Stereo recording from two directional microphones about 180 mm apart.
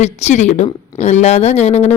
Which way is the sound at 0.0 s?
40° left (ahead or behind).